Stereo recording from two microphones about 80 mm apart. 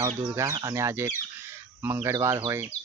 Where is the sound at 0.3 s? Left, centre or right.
Right.